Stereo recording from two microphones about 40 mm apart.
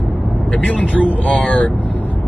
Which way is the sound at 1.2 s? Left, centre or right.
Left.